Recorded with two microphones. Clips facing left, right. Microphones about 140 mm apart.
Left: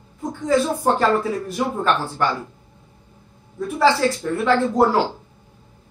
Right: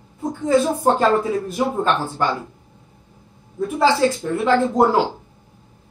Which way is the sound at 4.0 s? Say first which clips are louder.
Right 2 dB; 20° right (ahead or behind).